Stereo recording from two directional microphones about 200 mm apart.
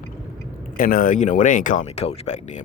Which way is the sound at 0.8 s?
45° left (ahead or behind).